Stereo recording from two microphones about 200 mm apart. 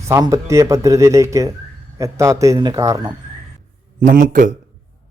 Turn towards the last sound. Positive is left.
turn(degrees=-40)  # may be behind; listen again after turning